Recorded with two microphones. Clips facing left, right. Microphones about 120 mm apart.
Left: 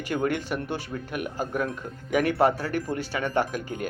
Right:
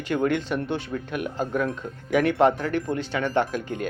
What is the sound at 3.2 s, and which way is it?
Speech, 5° left (ahead or behind).